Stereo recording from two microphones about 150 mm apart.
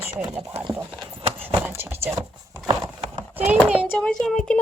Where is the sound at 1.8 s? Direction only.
15° right (ahead or behind).